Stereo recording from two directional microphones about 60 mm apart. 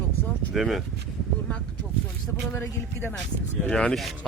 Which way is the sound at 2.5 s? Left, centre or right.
Left.